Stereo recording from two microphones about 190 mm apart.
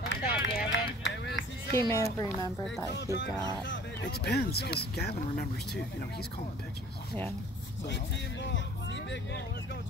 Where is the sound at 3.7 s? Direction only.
70° left (ahead or behind).